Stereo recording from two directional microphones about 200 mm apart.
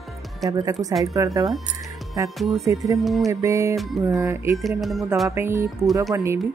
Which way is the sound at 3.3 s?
15° right (ahead or behind).